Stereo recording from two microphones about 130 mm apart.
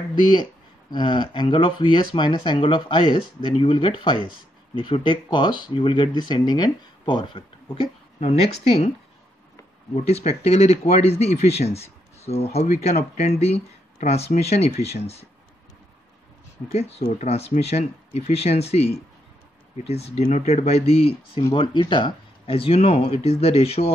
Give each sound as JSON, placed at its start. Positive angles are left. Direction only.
{"t": 0.3, "sound": "speech", "side_deg": 35}
{"t": 9.9, "sound": "speech", "side_deg": 55}
{"t": 16.7, "sound": "speech", "side_deg": 50}
{"t": 21.5, "sound": "speech", "side_deg": 35}